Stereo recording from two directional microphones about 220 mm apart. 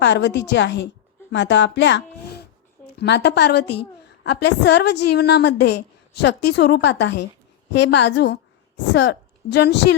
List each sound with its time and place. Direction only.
0.0 s a woman's voice: 55° left (ahead or behind)